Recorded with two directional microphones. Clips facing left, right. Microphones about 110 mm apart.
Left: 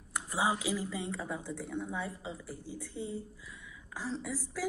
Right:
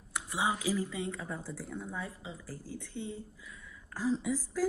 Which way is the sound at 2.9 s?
30° left (ahead or behind).